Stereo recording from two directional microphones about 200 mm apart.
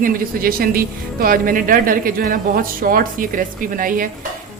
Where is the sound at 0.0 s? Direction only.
45° right (ahead or behind).